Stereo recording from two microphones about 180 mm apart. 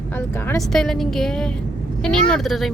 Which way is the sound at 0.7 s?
Centre (ahead or behind).